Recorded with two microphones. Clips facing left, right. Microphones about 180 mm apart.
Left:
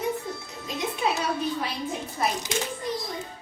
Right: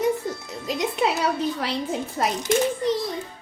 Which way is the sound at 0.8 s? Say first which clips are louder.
Right 4 dB; 70° right (ahead or behind).